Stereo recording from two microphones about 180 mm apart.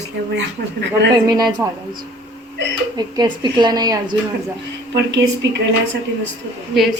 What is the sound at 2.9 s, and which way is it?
A woman's voice, 25° right (ahead or behind).